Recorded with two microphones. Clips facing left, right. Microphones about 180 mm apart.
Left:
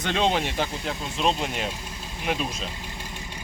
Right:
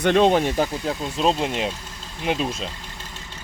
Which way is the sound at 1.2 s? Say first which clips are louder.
Right 4 dB; 30° right (ahead or behind).